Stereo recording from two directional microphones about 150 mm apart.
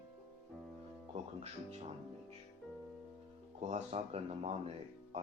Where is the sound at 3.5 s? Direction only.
50° right (ahead or behind).